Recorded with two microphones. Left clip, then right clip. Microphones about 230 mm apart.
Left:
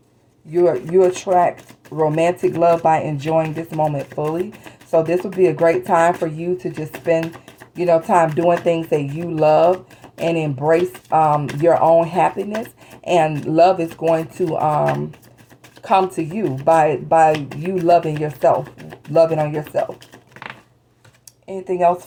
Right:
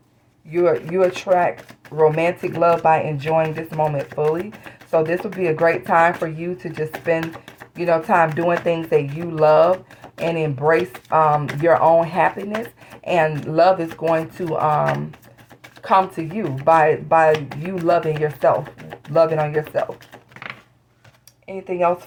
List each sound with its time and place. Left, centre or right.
0.5 s speech: right
8.4 s speech: right
21.7 s speech: right